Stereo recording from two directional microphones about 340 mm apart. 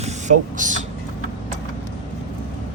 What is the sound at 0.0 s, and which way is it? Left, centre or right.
Speech, right.